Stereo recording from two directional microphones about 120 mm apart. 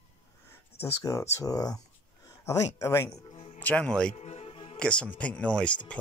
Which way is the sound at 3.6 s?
10° left (ahead or behind).